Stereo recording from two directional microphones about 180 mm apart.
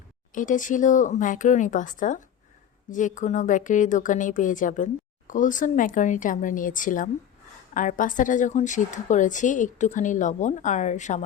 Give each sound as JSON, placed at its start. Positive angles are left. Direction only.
{"t": 0.3, "sound": "a woman's voice", "side_deg": 45}